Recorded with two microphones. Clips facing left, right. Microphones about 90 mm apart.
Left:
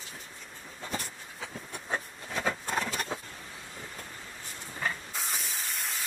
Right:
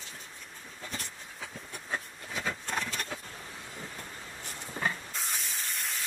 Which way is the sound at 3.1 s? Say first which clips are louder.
Left 4 dB; 25° left (ahead or behind).